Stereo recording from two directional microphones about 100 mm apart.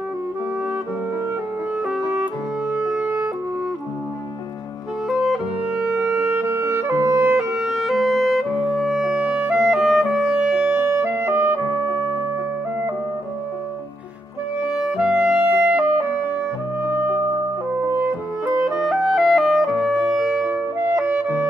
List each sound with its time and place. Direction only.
2.7 s clarinet: 10° right (ahead or behind)
5.0 s music: 5° right (ahead or behind)
10.9 s clarinet: 25° right (ahead or behind)
14.7 s clarinet: 5° right (ahead or behind)
18.7 s music: 5° right (ahead or behind)
20.4 s clarinet: 15° right (ahead or behind)